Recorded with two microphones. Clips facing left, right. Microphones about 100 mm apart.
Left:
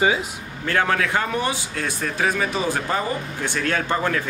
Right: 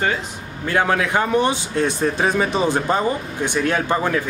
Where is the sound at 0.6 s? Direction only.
15° right (ahead or behind).